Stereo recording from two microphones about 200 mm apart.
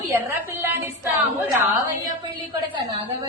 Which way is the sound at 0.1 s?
10° right (ahead or behind).